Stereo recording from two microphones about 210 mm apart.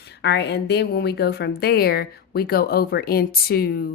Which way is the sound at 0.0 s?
55° left (ahead or behind).